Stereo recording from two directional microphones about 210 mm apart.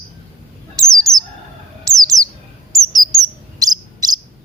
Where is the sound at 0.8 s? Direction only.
15° right (ahead or behind).